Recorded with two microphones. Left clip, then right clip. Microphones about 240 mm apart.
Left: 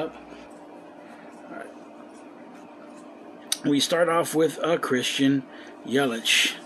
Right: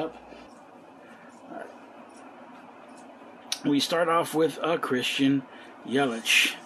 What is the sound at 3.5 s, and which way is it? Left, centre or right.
Speech, centre.